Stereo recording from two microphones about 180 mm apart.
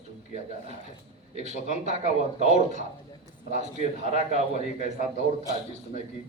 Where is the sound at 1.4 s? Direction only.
40° right (ahead or behind).